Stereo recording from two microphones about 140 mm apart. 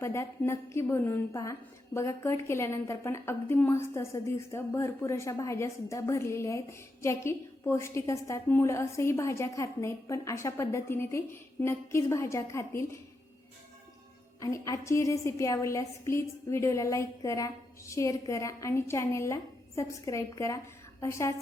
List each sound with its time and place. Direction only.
0.0 s a woman's voice: 20° left (ahead or behind)
14.4 s a woman's voice: 25° left (ahead or behind)